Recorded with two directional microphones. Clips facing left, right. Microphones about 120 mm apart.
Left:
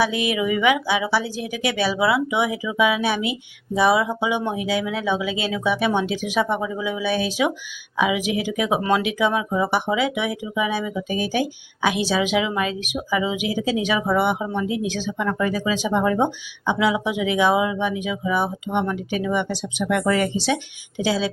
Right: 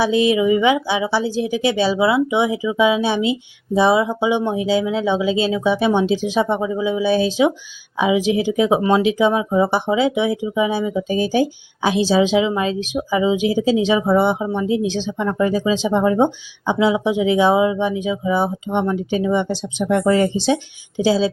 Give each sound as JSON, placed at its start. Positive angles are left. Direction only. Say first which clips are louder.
{"t": 0.0, "sound": "a woman's voice", "louder": "right 6 dB", "side_deg": -30}